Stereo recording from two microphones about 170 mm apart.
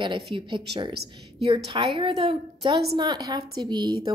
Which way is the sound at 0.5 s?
30° right (ahead or behind).